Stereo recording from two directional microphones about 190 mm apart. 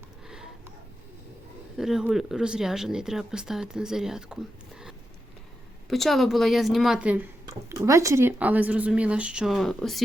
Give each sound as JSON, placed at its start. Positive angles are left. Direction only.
{"t": 1.7, "sound": "speech", "side_deg": 0}
{"t": 5.9, "sound": "speech", "side_deg": 0}